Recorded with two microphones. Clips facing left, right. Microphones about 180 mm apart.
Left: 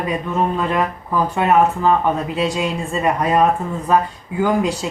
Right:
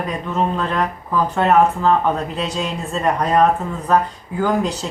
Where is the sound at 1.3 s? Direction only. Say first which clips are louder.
Right 1 dB; 10° left (ahead or behind).